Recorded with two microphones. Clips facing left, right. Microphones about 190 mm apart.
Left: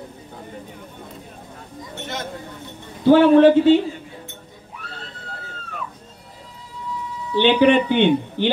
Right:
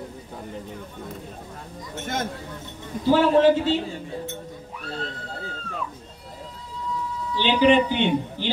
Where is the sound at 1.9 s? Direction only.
50° right (ahead or behind).